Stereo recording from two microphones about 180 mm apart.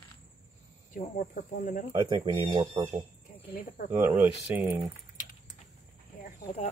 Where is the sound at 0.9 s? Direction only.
45° left (ahead or behind).